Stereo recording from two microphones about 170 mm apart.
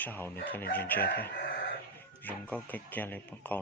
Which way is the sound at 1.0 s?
60° left (ahead or behind).